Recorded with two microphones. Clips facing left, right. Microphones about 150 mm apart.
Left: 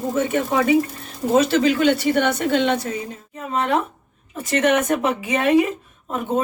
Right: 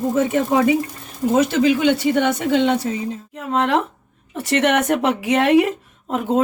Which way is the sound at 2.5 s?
15° right (ahead or behind).